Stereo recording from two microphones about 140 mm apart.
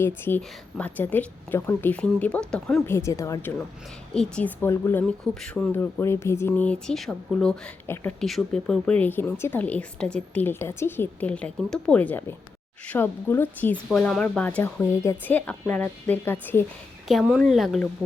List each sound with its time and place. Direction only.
0.3 s a woman's voice: 10° left (ahead or behind)
2.8 s speech: 20° left (ahead or behind)
4.1 s a woman's voice: 5° left (ahead or behind)
5.7 s a woman's voice: 15° left (ahead or behind)
7.9 s a woman's voice: 15° left (ahead or behind)
8.2 s a woman's voice: 5° left (ahead or behind)
17.1 s speech: centre (ahead or behind)